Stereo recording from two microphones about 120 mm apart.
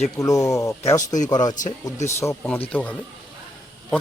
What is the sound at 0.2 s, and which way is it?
Speech, 30° left (ahead or behind).